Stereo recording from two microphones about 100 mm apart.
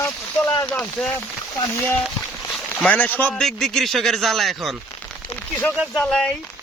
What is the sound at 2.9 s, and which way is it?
Speech, 15° left (ahead or behind).